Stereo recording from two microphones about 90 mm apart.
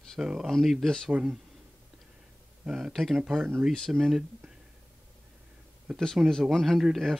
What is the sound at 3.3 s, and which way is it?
Speech, 25° right (ahead or behind).